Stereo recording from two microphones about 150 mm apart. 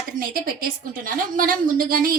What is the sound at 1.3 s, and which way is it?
Speech, 65° right (ahead or behind).